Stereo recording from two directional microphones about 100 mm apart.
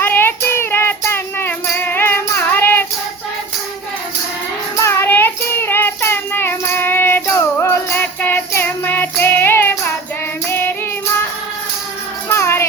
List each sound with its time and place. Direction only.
0.0 s music: 20° left (ahead or behind)
4.8 s child singing: 25° left (ahead or behind)
7.6 s music: 25° left (ahead or behind)
12.3 s music: 25° left (ahead or behind)